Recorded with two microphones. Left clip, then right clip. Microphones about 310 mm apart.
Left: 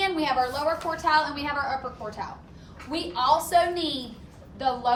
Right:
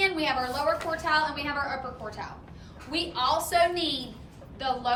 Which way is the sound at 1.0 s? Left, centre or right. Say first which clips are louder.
Left 4 dB; left.